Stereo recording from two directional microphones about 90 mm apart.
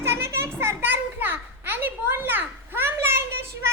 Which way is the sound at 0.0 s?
30° right (ahead or behind).